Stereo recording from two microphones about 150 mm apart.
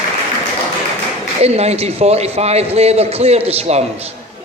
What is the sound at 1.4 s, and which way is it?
A man's voice, 45° right (ahead or behind).